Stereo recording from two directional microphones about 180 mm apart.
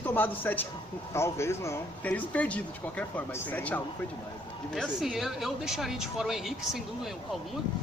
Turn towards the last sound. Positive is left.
turn(degrees=0)  # may be behind; listen again after turning